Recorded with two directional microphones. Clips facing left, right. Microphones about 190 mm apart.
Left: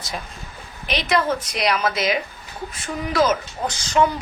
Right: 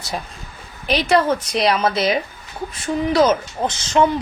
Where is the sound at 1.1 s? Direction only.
30° right (ahead or behind).